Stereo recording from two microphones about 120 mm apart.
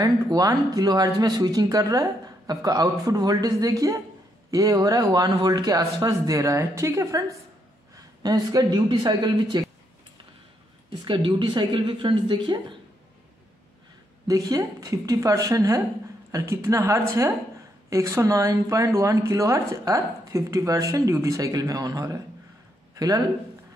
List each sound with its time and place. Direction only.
0.0 s a woman's voice: 30° right (ahead or behind)
11.1 s speech: 45° right (ahead or behind)
14.2 s a woman's voice: 30° right (ahead or behind)